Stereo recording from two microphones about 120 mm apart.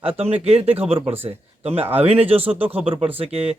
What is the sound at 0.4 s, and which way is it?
A man's voice, 55° right (ahead or behind).